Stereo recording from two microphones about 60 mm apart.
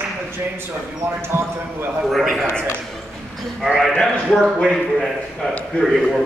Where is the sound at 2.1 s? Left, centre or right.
Centre.